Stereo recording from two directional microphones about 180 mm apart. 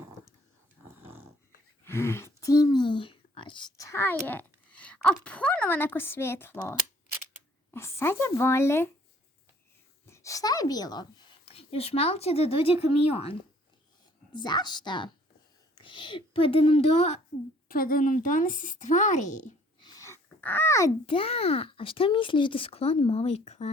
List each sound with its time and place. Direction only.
0.9 s dog: 10° right (ahead or behind)
1.8 s a woman's voice: 15° left (ahead or behind)
10.1 s a woman's voice: 15° left (ahead or behind)
11.4 s speech: 30° left (ahead or behind)
14.3 s a woman's voice: 25° left (ahead or behind)
17.7 s speech: 55° left (ahead or behind)
19.8 s a sound: 20° left (ahead or behind)
21.1 s speech: 30° left (ahead or behind)